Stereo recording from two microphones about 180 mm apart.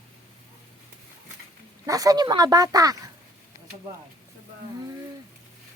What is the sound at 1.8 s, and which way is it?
Speech, 20° right (ahead or behind).